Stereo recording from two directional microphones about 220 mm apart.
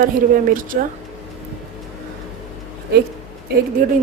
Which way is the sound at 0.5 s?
40° right (ahead or behind).